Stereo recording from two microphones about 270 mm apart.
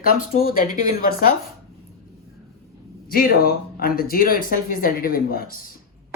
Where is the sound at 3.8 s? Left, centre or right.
Left.